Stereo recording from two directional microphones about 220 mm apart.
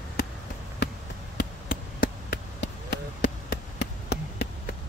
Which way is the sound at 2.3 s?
50° left (ahead or behind).